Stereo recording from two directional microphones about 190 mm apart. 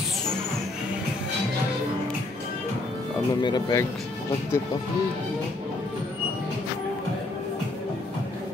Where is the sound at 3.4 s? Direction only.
20° left (ahead or behind).